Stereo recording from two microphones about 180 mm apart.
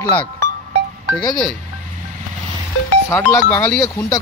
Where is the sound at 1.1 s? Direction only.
20° left (ahead or behind).